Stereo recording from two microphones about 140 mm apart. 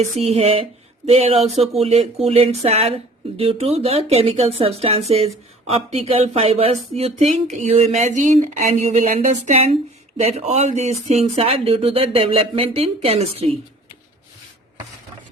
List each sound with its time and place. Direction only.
0.0 s speech: 45° right (ahead or behind)